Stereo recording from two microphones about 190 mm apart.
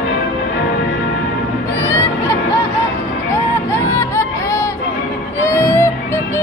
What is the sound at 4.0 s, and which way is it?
Music, 15° left (ahead or behind).